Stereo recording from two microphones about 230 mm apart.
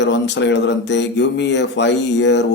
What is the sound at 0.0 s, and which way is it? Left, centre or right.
Speech, left.